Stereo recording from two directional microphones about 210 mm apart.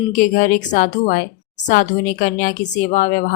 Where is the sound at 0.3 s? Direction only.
40° left (ahead or behind).